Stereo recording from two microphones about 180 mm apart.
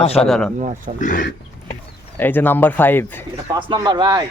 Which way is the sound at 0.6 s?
40° right (ahead or behind).